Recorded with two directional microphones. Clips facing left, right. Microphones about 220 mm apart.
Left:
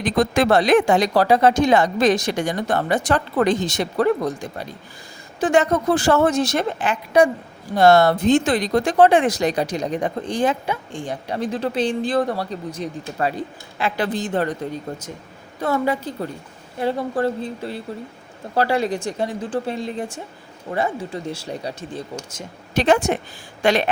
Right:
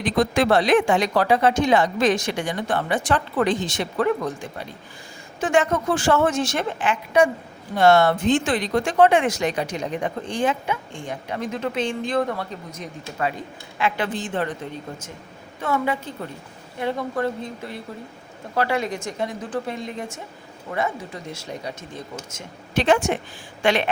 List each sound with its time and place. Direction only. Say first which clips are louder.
0.0 s speech: left 2 dB; 45° left (ahead or behind)
15.6 s speech: left 3 dB; 35° left (ahead or behind)
21.3 s speech: left 3 dB; 35° left (ahead or behind)